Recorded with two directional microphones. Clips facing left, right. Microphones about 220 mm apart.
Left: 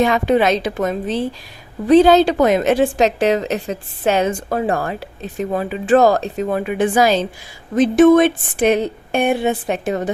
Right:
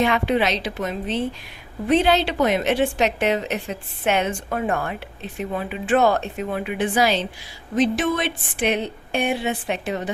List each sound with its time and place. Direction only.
0.0 s a woman's voice: 45° left (ahead or behind)